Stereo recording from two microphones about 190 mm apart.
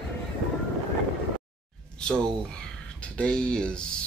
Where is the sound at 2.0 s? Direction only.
5° left (ahead or behind).